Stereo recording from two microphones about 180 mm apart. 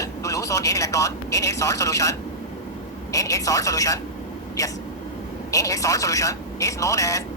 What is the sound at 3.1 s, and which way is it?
Speech, 20° left (ahead or behind).